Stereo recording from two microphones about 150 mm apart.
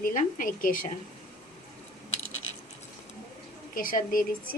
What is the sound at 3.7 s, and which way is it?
Speech, 70° left (ahead or behind).